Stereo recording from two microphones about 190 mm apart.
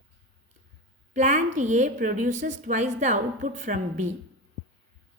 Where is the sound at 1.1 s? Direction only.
40° right (ahead or behind).